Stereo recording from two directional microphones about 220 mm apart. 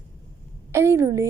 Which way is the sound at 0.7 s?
10° right (ahead or behind).